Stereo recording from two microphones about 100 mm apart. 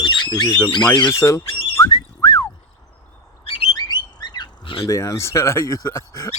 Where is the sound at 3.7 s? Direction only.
45° left (ahead or behind).